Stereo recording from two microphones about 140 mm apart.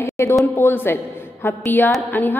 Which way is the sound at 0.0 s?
20° left (ahead or behind).